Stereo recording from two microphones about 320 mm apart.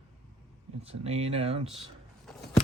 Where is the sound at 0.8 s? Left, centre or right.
Centre.